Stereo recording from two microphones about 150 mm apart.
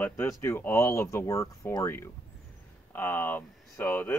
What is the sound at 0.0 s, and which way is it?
Speech, 15° left (ahead or behind).